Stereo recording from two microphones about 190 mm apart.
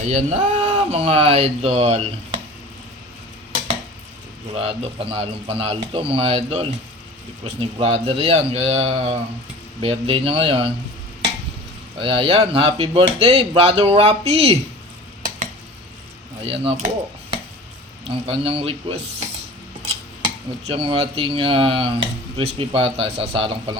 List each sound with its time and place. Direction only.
0.0 s speech: 35° right (ahead or behind)
4.5 s speech: 30° right (ahead or behind)
11.9 s speech: 30° right (ahead or behind)
16.4 s speech: 30° right (ahead or behind)
18.1 s speech: 30° right (ahead or behind)
20.2 s speech: 25° right (ahead or behind)